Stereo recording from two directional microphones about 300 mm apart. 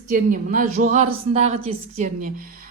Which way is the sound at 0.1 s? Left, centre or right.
Right.